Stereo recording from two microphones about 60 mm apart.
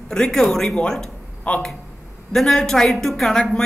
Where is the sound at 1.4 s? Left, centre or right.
Centre.